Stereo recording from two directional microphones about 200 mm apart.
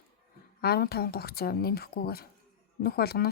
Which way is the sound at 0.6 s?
50° left (ahead or behind).